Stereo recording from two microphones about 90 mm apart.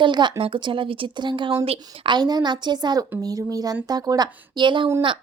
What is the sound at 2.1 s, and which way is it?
A woman's voice, 50° right (ahead or behind).